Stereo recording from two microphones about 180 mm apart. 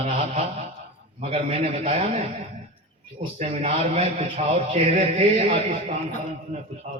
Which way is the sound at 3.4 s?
35° right (ahead or behind).